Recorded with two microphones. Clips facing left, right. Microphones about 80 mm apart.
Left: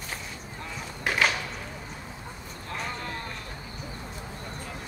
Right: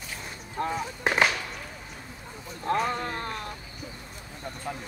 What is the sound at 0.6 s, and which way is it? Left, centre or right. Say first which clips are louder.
Speech: right 12 dB; right.